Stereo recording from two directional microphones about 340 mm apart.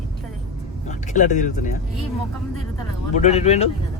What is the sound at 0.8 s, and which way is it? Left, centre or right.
Speech, left.